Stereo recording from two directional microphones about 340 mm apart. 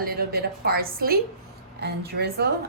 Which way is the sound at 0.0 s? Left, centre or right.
Right.